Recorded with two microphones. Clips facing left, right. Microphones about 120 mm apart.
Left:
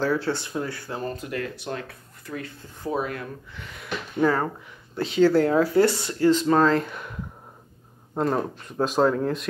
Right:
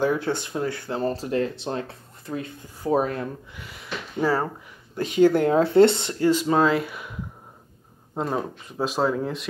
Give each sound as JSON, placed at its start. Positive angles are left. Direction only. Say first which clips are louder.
{"t": 0.0, "sound": "speech", "louder": "right 1 dB", "side_deg": -20}
{"t": 1.0, "sound": "speech", "louder": "right 7 dB", "side_deg": -30}
{"t": 2.9, "sound": "speech", "louder": "right 5 dB", "side_deg": -35}
{"t": 3.5, "sound": "speech", "louder": "left 2 dB", "side_deg": -5}
{"t": 5.1, "sound": "speech", "louder": "right 1 dB", "side_deg": -15}
{"t": 6.3, "sound": "speech", "louder": "even", "side_deg": -10}